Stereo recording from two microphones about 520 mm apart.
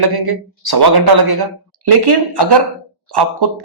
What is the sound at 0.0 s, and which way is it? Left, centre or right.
Speech, right.